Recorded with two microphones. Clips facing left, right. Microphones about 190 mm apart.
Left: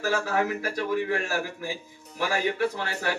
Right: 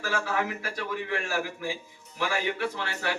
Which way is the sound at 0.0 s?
40° left (ahead or behind).